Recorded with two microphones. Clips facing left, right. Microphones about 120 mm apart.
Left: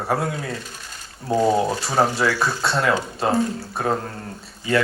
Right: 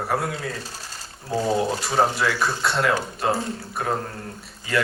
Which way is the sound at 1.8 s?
25° left (ahead or behind).